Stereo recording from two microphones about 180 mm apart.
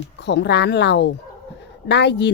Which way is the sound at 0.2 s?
70° left (ahead or behind).